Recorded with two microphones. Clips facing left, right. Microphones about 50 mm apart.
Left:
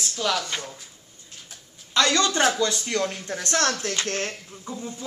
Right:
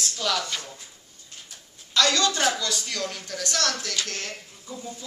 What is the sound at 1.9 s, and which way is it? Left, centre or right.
A woman's voice, left.